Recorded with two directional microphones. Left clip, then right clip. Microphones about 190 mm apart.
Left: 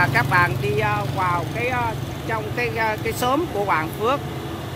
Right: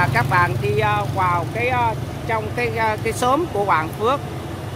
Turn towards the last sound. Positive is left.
turn(degrees=-10)  # may be behind; listen again after turning